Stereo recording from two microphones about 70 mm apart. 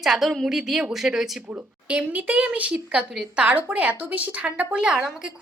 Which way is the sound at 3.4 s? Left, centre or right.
Centre.